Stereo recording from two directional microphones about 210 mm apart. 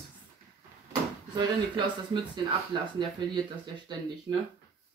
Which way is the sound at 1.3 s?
20° right (ahead or behind).